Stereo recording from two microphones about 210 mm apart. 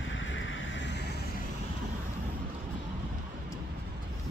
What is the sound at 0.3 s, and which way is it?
Vehicle, 65° left (ahead or behind).